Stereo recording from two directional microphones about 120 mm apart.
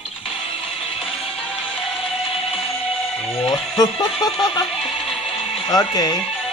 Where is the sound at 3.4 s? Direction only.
35° left (ahead or behind).